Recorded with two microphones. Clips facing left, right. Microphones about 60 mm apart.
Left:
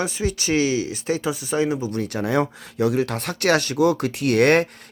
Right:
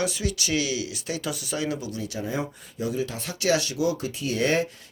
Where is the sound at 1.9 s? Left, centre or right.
Left.